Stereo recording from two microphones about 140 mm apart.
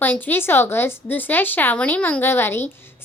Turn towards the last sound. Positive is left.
turn(degrees=15)  # may be behind; listen again after turning